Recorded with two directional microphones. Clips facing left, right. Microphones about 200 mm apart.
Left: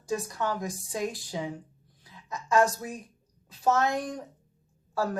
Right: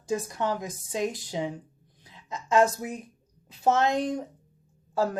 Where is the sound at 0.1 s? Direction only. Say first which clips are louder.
Right 2 dB; 20° right (ahead or behind).